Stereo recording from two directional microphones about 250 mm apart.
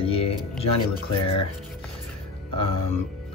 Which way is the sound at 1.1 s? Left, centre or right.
Left.